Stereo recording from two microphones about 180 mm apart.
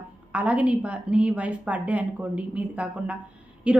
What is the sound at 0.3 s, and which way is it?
A woman's voice, 5° right (ahead or behind).